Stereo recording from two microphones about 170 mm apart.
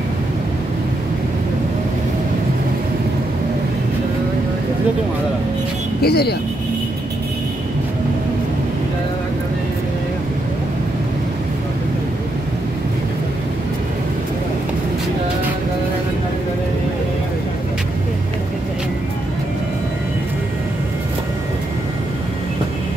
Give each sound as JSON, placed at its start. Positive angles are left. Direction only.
{"t": 6.0, "sound": "speech", "side_deg": 70}